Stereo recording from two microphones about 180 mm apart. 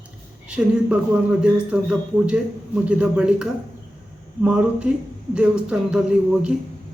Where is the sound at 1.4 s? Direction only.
5° right (ahead or behind).